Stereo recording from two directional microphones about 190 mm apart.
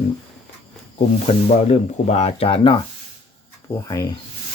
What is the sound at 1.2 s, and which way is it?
Speech, 35° left (ahead or behind).